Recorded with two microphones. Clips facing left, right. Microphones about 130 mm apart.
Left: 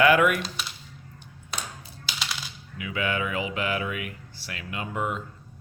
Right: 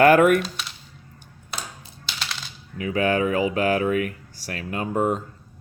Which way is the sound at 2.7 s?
40° right (ahead or behind).